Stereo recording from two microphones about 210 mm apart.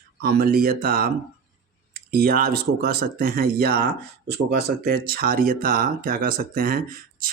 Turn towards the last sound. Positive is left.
turn(degrees=-45)  # may be behind; listen again after turning